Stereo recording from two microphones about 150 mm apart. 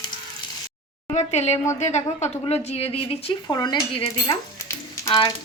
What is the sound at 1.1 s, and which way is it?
Frying, 45° left (ahead or behind).